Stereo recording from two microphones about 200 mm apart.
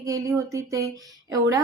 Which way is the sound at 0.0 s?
15° right (ahead or behind).